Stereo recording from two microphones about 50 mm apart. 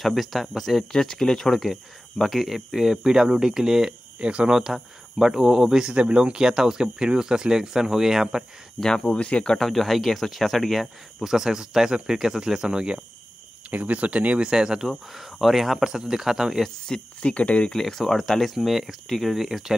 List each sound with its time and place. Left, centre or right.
0.0 s speech: centre
2.2 s speech: centre
4.2 s speech: right
4.6 s speech: centre
5.9 s speech: right
8.7 s speech: centre
9.6 s speech: centre
13.7 s speech: right
14.4 s speech: centre
16.6 s speech: centre
17.6 s speech: centre